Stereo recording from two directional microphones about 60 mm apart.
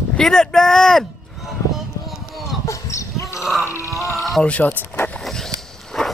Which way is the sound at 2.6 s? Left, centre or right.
Left.